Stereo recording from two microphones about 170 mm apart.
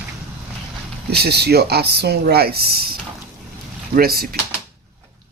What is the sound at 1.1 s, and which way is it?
Speech, 70° right (ahead or behind).